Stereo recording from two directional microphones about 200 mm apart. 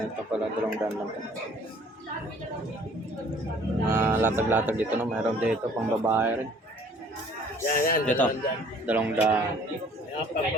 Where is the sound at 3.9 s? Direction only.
10° right (ahead or behind).